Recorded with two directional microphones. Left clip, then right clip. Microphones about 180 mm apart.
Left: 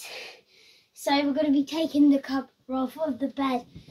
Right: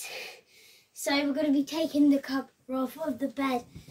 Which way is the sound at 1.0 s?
30° right (ahead or behind).